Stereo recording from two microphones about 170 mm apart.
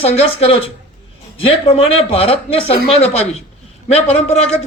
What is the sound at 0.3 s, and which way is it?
Speech, 35° left (ahead or behind).